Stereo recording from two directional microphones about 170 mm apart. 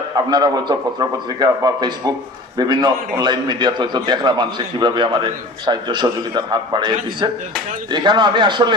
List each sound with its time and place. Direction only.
0.3 s a man's voice: 25° right (ahead or behind)